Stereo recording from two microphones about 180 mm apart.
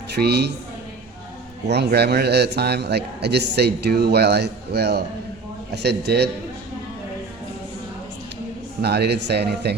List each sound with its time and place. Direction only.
0.1 s a woman's voice: 65° right (ahead or behind)
1.6 s a man's voice: 70° right (ahead or behind)
8.8 s a man's voice: 65° right (ahead or behind)